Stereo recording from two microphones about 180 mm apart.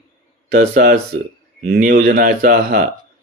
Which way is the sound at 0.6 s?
55° right (ahead or behind).